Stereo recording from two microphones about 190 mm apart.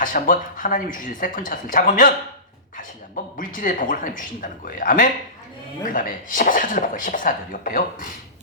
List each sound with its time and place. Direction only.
0.0 s speech: 45° left (ahead or behind)
3.3 s speech: 45° left (ahead or behind)